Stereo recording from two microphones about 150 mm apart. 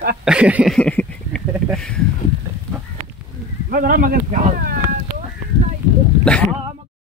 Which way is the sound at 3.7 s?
70° right (ahead or behind).